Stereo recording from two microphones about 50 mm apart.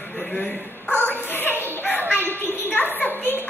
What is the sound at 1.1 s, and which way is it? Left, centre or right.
Bow-wow, left.